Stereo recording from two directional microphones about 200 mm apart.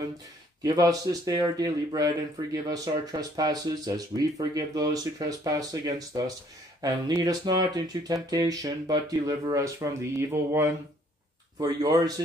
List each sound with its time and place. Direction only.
0.6 s speech: 20° right (ahead or behind)